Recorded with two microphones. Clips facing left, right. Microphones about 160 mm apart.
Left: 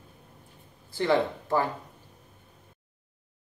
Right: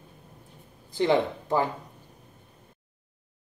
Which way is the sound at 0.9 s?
20° right (ahead or behind).